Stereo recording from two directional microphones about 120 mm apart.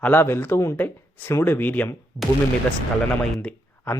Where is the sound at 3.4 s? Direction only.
10° left (ahead or behind).